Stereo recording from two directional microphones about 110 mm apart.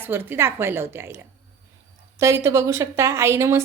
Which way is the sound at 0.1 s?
20° right (ahead or behind).